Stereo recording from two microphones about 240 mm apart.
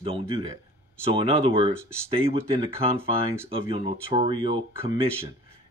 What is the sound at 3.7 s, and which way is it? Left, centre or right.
Speech, right.